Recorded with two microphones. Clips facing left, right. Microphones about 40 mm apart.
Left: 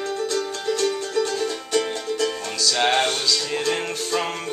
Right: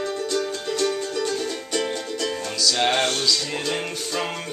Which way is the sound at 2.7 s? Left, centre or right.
Centre.